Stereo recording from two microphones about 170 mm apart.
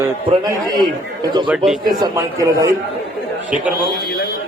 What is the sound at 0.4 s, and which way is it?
Speech, 25° right (ahead or behind).